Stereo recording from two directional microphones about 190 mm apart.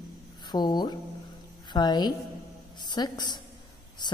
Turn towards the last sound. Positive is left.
turn(degrees=20)  # may be behind; listen again after turning